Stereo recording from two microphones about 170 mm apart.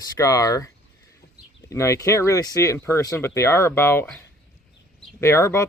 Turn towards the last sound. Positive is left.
turn(degrees=15)  # may be behind; listen again after turning